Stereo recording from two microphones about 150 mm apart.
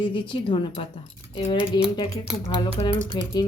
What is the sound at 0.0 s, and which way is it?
Speech, 35° left (ahead or behind).